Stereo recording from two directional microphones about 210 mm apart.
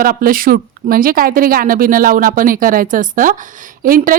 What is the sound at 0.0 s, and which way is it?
A woman's voice, 45° right (ahead or behind).